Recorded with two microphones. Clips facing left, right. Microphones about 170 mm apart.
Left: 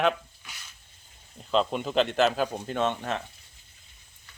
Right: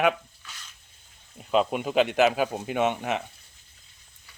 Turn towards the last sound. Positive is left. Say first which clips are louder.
# right 2 dB
turn(degrees=-15)  # may be behind; listen again after turning